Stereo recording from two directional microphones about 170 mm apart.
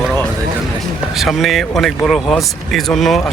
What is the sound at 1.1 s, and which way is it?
Speech, centre (ahead or behind).